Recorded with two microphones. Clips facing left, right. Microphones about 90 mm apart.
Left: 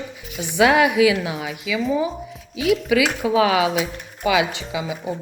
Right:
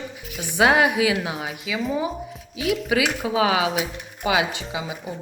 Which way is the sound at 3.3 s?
30° right (ahead or behind).